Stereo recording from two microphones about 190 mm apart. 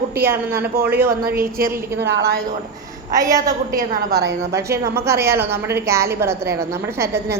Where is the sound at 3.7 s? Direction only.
50° right (ahead or behind).